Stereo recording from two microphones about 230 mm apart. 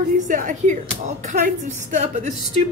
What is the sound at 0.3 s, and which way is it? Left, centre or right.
A woman's voice, right.